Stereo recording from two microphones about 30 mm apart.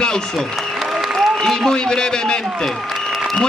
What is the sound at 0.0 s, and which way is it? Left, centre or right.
A man's voice, left.